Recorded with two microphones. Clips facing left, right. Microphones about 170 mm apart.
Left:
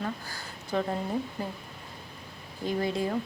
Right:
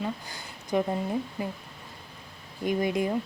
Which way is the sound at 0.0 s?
15° right (ahead or behind).